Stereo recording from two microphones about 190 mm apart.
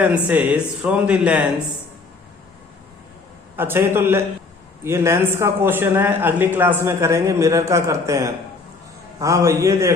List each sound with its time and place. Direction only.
0.0 s a man's voice: 5° right (ahead or behind)
3.6 s a man's voice: 10° right (ahead or behind)